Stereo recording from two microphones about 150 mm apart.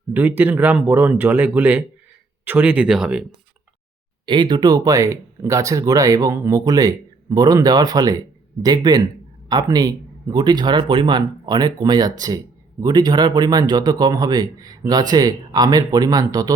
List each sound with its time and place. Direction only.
0.1 s speech: 15° right (ahead or behind)
4.3 s speech: 30° right (ahead or behind)